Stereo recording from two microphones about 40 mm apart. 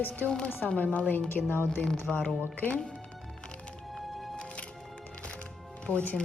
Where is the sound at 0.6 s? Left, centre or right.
Left.